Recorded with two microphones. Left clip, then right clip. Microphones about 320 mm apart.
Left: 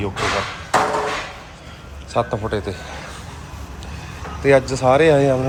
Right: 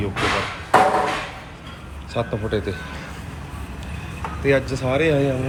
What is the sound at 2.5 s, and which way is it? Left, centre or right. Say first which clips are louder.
Speech: left 1 dB; left.